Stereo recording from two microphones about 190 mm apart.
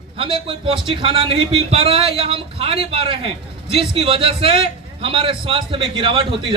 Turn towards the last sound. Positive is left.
turn(degrees=-30)  # may be behind; listen again after turning